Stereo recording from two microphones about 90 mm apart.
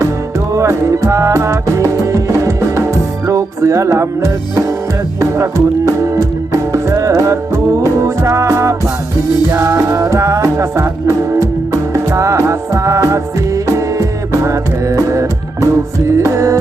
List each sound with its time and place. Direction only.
0.3 s music: 35° right (ahead or behind)